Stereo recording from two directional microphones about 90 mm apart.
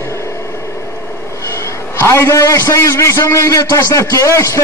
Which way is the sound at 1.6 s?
30° left (ahead or behind).